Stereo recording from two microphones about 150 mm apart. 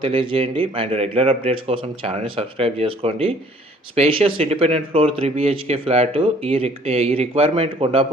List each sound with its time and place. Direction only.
0.0 s speech: 35° right (ahead or behind)